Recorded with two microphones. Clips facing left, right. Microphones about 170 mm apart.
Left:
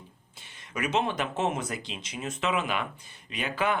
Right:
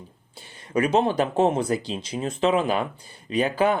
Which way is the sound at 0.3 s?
35° right (ahead or behind).